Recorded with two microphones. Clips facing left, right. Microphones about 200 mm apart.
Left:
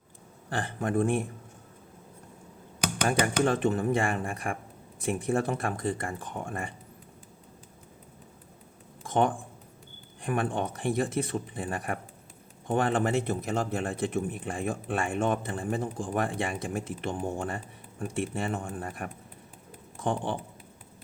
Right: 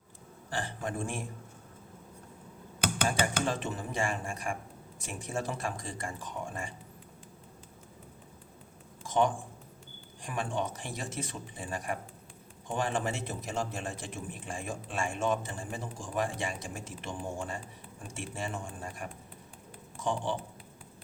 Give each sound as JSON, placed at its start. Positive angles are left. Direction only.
{"t": 0.5, "sound": "a man's voice", "side_deg": 55}
{"t": 3.4, "sound": "a man's voice", "side_deg": 60}
{"t": 9.0, "sound": "a sound", "side_deg": 55}
{"t": 10.2, "sound": "a man's voice", "side_deg": 55}